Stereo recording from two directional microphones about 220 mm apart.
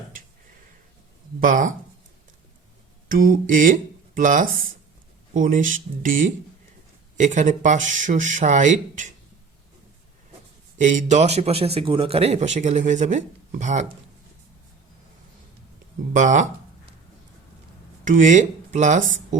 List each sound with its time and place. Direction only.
1.4 s a man's voice: 35° right (ahead or behind)
3.1 s a man's voice: 40° right (ahead or behind)
10.8 s a man's voice: 35° right (ahead or behind)
16.1 s a sound: 35° right (ahead or behind)
18.0 s speech: 35° right (ahead or behind)